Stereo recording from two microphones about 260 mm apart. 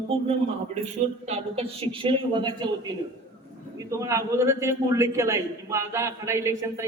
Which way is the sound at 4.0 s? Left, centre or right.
Centre.